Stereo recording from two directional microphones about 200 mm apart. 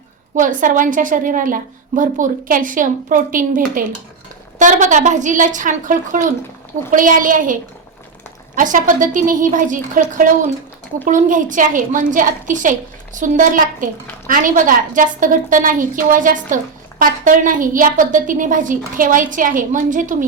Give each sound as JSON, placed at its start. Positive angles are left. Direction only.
{"t": 0.3, "sound": "a woman's voice", "side_deg": -40}
{"t": 8.5, "sound": "a woman's voice", "side_deg": -40}